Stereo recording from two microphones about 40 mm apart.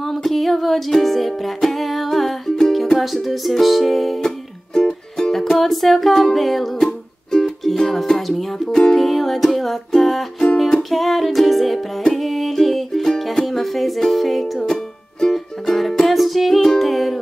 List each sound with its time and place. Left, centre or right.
0.0 s music: centre
4.7 s music: centre
5.3 s music: centre
13.5 s music: centre
14.6 s music: centre